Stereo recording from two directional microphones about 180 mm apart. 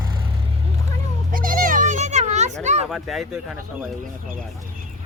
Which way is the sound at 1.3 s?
50° right (ahead or behind).